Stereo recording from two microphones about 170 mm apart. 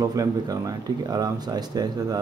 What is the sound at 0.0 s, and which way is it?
Speech, 20° right (ahead or behind).